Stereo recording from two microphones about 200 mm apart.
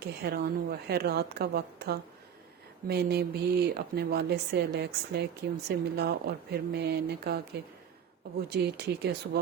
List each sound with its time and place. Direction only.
0.0 s speech: 55° right (ahead or behind)